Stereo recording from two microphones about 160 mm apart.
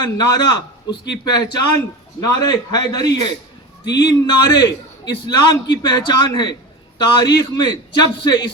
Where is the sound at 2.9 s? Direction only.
25° left (ahead or behind).